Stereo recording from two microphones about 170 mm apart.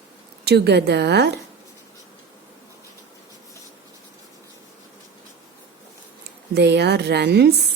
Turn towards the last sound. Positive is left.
turn(degrees=-75)  # may be behind; listen again after turning